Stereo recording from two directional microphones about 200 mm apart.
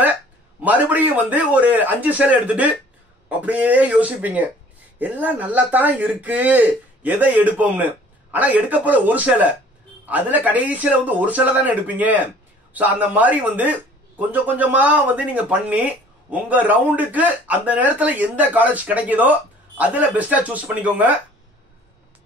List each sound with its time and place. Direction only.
0.6 s speech: 10° right (ahead or behind)